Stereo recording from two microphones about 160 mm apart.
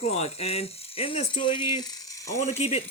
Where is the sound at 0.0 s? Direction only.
40° left (ahead or behind); by 2.3 s 20° left (ahead or behind).